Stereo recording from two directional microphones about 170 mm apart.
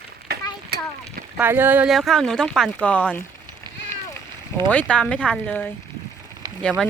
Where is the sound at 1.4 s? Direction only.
10° right (ahead or behind); by 3.2 s 10° left (ahead or behind).